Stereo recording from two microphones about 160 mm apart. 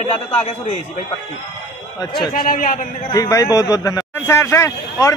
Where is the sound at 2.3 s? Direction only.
65° left (ahead or behind).